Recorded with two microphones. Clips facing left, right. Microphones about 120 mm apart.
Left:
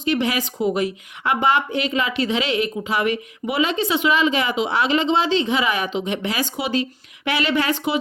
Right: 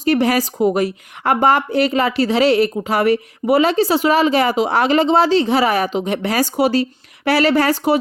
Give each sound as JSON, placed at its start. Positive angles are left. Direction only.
{"t": 0.0, "sound": "a woman's voice", "side_deg": -45}